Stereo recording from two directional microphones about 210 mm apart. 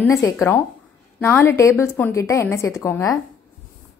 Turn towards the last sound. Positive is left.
turn(degrees=15)  # may be behind; listen again after turning